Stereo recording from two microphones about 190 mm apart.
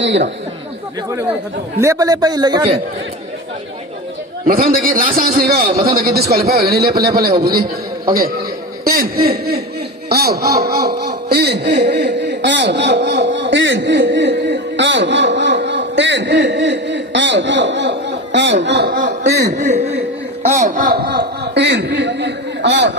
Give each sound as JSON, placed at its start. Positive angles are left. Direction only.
{"t": 0.0, "sound": "speech", "side_deg": -70}
{"t": 1.8, "sound": "a man's voice", "side_deg": -15}
{"t": 4.4, "sound": "a man's voice", "side_deg": -50}
{"t": 8.8, "sound": "a man's voice", "side_deg": -50}
{"t": 19.2, "sound": "speech", "side_deg": -60}
{"t": 19.5, "sound": "a man's voice", "side_deg": -40}